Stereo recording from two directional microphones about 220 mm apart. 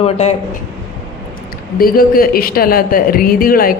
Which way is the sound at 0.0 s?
30° left (ahead or behind).